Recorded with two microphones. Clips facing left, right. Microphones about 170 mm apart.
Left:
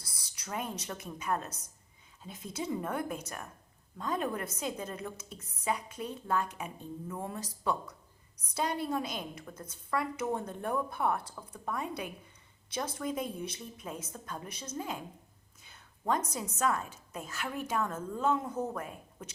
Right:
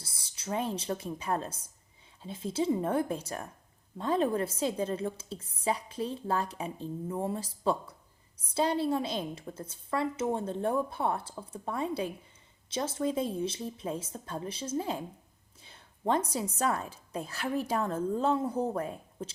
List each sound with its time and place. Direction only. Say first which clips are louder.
0.0 s a woman's voice: right 6 dB; 25° right (ahead or behind)